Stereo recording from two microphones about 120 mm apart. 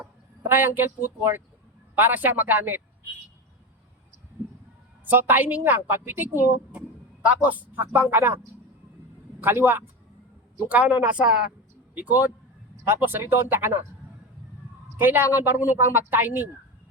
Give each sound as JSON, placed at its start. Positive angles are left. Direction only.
{"t": 0.0, "sound": "a woman's voice", "side_deg": -15}
{"t": 5.0, "sound": "a woman's voice", "side_deg": -15}
{"t": 6.7, "sound": "a sound", "side_deg": -10}
{"t": 7.4, "sound": "a woman's voice", "side_deg": -15}
{"t": 9.4, "sound": "a woman's voice", "side_deg": -20}
{"t": 14.9, "sound": "a woman's voice", "side_deg": -15}